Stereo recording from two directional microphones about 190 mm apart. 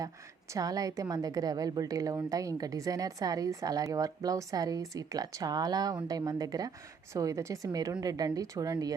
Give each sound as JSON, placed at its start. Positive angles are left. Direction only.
{"t": 0.5, "sound": "a woman's voice", "side_deg": -20}